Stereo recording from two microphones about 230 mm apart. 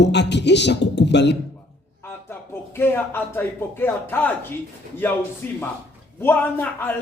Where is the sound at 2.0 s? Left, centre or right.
Centre.